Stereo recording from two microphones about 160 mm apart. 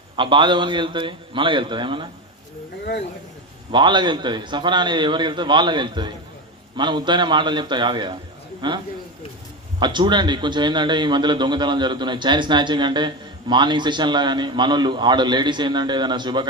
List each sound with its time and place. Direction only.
0.2 s a man's voice: 30° right (ahead or behind)
3.7 s a man's voice: 30° right (ahead or behind)
9.8 s a man's voice: 30° right (ahead or behind)